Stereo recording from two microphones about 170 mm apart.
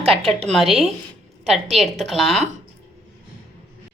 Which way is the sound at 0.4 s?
Centre (ahead or behind).